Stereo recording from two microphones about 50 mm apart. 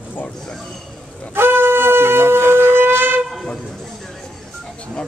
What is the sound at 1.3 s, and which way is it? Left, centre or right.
Shofar, right.